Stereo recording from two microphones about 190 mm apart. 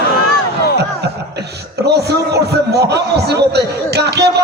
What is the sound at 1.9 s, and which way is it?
A man's voice, 60° right (ahead or behind).